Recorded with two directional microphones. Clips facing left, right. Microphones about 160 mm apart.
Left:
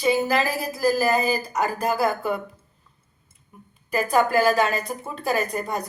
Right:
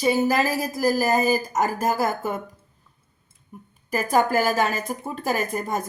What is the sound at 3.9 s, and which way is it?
A woman's voice, 40° right (ahead or behind).